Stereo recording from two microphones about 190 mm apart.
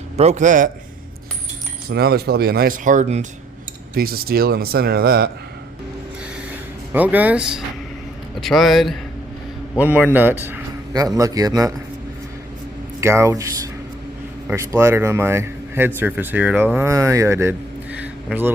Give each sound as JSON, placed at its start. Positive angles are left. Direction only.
{"t": 0.2, "sound": "a man's voice", "side_deg": -35}
{"t": 1.9, "sound": "a man's voice", "side_deg": -55}
{"t": 3.9, "sound": "a man's voice", "side_deg": -50}
{"t": 6.9, "sound": "a man's voice", "side_deg": -10}
{"t": 13.0, "sound": "speech", "side_deg": -15}
{"t": 18.0, "sound": "a sound", "side_deg": -10}